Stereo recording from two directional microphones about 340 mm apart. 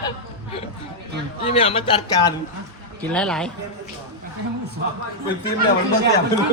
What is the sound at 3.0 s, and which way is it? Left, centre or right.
Speech, centre.